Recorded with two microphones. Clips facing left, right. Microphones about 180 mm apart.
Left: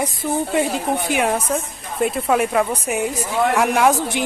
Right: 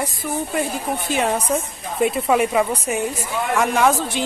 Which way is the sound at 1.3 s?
Centre (ahead or behind).